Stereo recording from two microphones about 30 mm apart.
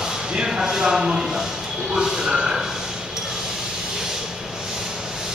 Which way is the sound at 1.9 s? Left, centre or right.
Right.